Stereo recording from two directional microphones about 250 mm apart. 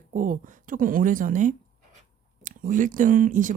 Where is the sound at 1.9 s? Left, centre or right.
Right.